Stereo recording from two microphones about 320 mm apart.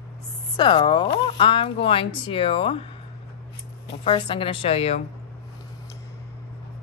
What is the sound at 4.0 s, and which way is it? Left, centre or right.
Speech, centre.